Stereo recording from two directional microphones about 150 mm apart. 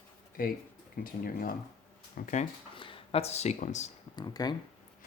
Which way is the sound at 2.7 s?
35° left (ahead or behind).